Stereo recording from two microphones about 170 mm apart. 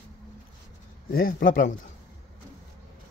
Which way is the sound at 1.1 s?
55° left (ahead or behind).